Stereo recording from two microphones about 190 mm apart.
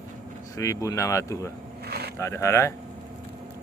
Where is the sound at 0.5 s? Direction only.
15° left (ahead or behind).